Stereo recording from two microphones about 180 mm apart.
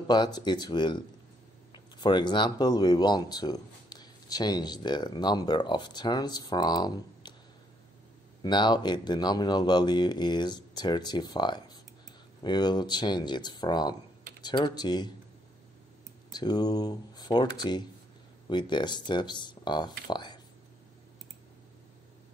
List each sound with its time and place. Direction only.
0.1 s speech: 25° left (ahead or behind)
2.0 s speech: 25° left (ahead or behind)
8.4 s speech: 25° left (ahead or behind)
16.3 s speech: 25° left (ahead or behind)